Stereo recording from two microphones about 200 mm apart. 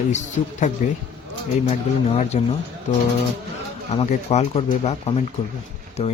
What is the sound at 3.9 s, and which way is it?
Speech, 35° left (ahead or behind).